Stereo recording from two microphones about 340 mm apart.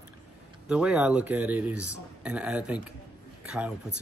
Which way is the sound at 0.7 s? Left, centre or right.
Centre.